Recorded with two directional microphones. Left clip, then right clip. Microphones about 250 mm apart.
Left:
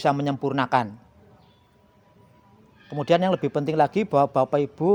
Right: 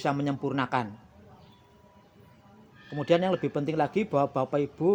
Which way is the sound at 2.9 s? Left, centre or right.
Left.